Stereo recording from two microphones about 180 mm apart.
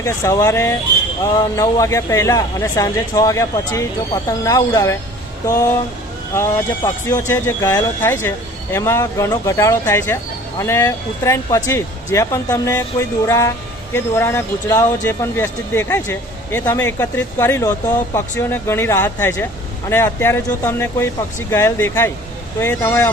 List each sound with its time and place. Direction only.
0.0 s speech: 20° left (ahead or behind)
6.3 s speech: 15° left (ahead or behind)